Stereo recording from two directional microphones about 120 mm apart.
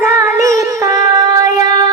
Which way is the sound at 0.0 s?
25° right (ahead or behind).